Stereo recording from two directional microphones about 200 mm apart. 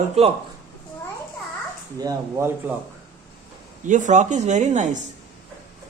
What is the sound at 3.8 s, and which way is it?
Speech, 40° right (ahead or behind).